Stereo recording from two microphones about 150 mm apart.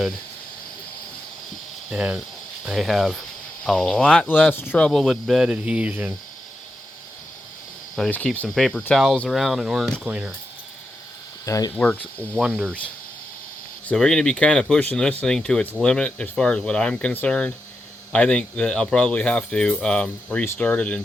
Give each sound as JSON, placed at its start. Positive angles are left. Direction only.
{"t": 1.9, "sound": "speech", "side_deg": -5}
{"t": 4.9, "sound": "speech", "side_deg": 0}
{"t": 7.9, "sound": "speech", "side_deg": 5}
{"t": 11.4, "sound": "speech", "side_deg": 20}
{"t": 11.7, "sound": "speech", "side_deg": 10}